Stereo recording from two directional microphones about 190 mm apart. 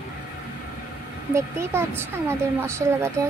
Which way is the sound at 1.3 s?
15° right (ahead or behind).